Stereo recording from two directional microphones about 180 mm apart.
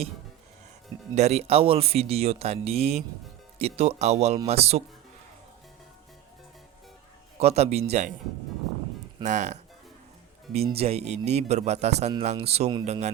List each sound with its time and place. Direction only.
1.1 s speech: 35° right (ahead or behind)
7.3 s speech: 35° right (ahead or behind)
9.2 s speech: 40° right (ahead or behind)